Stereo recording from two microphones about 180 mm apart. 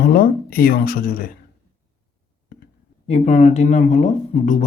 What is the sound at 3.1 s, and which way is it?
Speech, 40° left (ahead or behind).